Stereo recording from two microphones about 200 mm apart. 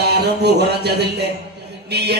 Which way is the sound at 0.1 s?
55° right (ahead or behind).